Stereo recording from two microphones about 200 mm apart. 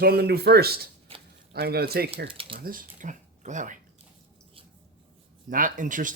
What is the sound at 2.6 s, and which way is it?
Speech, 45° right (ahead or behind).